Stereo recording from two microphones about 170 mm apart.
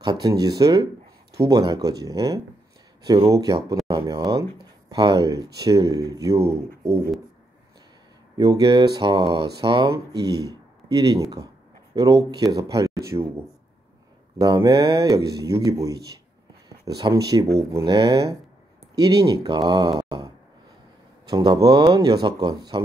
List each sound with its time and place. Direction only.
0.0 s speech: 20° right (ahead or behind)
8.4 s speech: 20° right (ahead or behind)
14.4 s speech: 20° right (ahead or behind)